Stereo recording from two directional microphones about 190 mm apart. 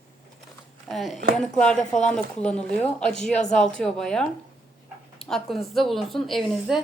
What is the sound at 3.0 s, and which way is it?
Speech, 40° left (ahead or behind).